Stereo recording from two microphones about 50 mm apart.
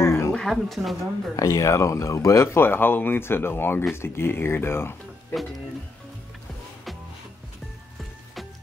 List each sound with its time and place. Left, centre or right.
0.0 s a sound: left
0.3 s speech: centre
1.6 s speech: left